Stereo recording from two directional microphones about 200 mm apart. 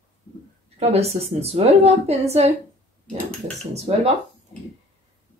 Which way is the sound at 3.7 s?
30° right (ahead or behind).